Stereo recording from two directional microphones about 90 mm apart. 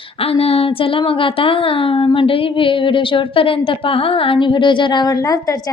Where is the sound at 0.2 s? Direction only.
90° left.